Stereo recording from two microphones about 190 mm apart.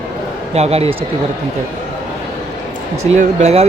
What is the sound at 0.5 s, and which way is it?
Speech, 35° right (ahead or behind).